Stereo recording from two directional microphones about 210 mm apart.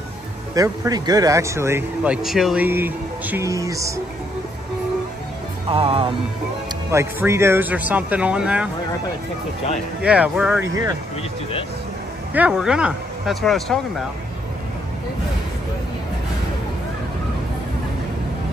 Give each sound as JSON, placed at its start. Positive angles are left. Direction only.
{"t": 0.6, "sound": "speech", "side_deg": -20}
{"t": 2.2, "sound": "speech", "side_deg": 0}
{"t": 5.7, "sound": "speech", "side_deg": -25}
{"t": 6.9, "sound": "speech", "side_deg": -10}
{"t": 10.0, "sound": "speech", "side_deg": -5}
{"t": 12.4, "sound": "speech", "side_deg": -5}